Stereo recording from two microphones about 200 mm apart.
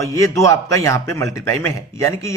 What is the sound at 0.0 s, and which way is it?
A man's voice, 15° left (ahead or behind).